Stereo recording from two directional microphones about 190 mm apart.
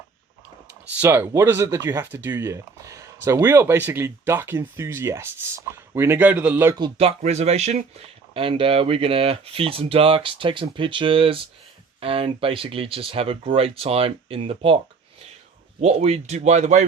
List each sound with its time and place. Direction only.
1.0 s speech: 15° right (ahead or behind)
6.7 s speech: 25° right (ahead or behind)
7.2 s speech: 35° right (ahead or behind)
15.8 s speech: 35° right (ahead or behind)